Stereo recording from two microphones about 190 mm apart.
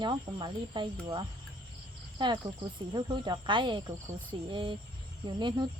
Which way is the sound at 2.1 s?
25° right (ahead or behind).